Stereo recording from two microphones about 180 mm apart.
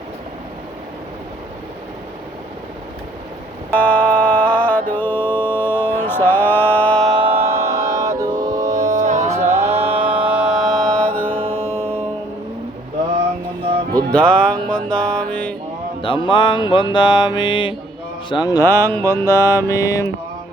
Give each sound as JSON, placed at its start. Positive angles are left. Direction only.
{"t": 3.7, "sound": "music", "side_deg": 10}
{"t": 7.2, "sound": "mantra", "side_deg": -30}
{"t": 7.4, "sound": "music", "side_deg": -15}
{"t": 8.9, "sound": "music", "side_deg": -45}
{"t": 10.0, "sound": "mantra", "side_deg": -10}
{"t": 11.5, "sound": "music", "side_deg": 10}
{"t": 13.9, "sound": "music", "side_deg": 5}
{"t": 16.0, "sound": "music", "side_deg": 30}
{"t": 18.3, "sound": "mantra", "side_deg": 20}